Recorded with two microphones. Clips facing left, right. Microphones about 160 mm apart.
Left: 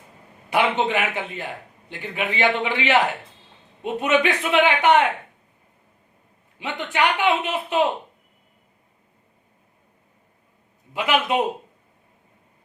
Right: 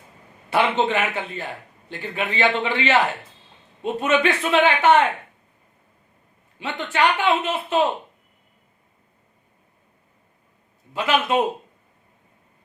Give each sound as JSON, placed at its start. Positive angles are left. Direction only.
{"t": 0.5, "sound": "a man's voice", "side_deg": 15}
{"t": 6.6, "sound": "a man's voice", "side_deg": 15}
{"t": 10.9, "sound": "a man's voice", "side_deg": 15}